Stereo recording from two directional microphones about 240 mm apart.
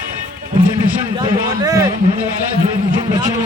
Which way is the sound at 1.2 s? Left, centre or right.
Centre.